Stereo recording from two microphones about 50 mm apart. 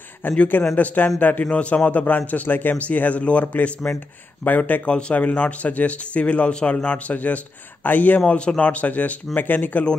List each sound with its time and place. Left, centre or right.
0.2 s a man's voice: left
1.5 s a man's voice: left
4.8 s a man's voice: left
8.3 s a man's voice: left